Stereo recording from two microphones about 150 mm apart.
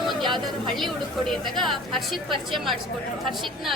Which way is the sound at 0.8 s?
Centre (ahead or behind).